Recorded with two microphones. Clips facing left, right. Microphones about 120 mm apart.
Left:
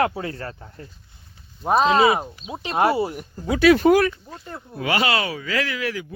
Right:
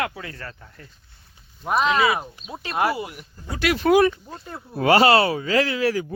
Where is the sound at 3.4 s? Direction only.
40° left (ahead or behind).